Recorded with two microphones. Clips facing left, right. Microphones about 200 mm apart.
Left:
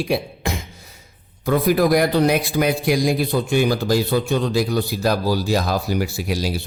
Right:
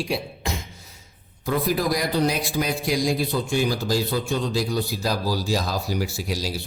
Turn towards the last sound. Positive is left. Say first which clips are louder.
# left 5 dB
turn(degrees=60)  # may be behind; listen again after turning